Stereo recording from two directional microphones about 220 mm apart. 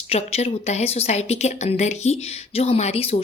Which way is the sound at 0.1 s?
30° left (ahead or behind).